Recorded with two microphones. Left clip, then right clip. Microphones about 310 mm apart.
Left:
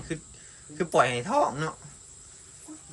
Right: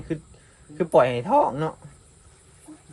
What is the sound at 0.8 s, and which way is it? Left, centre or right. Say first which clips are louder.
Speech: right 5 dB; centre.